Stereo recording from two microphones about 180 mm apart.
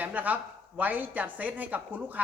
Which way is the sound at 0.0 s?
10° right (ahead or behind).